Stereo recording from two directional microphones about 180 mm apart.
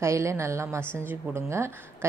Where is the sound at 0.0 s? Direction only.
15° right (ahead or behind).